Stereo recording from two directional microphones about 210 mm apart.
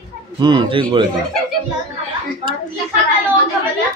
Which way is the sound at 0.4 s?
20° right (ahead or behind).